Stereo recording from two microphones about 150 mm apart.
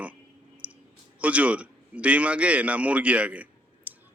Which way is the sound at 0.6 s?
10° right (ahead or behind).